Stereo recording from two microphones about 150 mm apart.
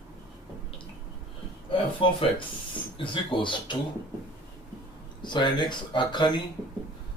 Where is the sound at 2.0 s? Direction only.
35° left (ahead or behind).